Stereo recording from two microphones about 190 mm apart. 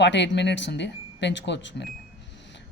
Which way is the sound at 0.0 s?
65° left (ahead or behind).